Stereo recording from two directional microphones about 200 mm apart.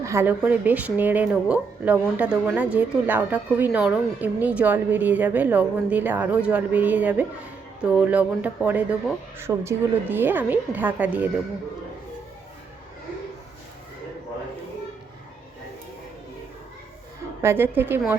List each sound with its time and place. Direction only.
0.0 s a woman's voice: 15° right (ahead or behind)
17.4 s a woman's voice: 10° right (ahead or behind)